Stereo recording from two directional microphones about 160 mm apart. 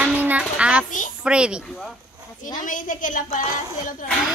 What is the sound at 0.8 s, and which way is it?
Speech, 55° left (ahead or behind).